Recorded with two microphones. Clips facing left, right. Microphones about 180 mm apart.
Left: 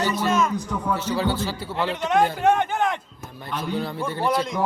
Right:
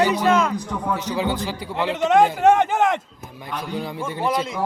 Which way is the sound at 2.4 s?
90° right.